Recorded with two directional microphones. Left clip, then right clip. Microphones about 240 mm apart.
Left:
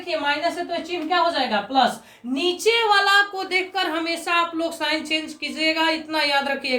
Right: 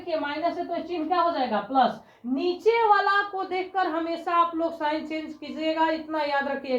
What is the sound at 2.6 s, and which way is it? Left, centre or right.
A woman's voice, left.